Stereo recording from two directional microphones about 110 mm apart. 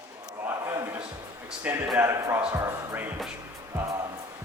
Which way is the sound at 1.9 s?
25° right (ahead or behind).